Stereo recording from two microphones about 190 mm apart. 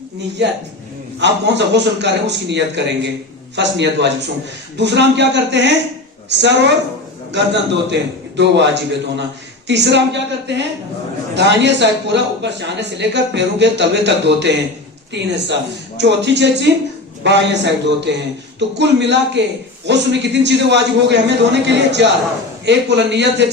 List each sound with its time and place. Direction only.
1.2 s a man's voice: 65° right (ahead or behind)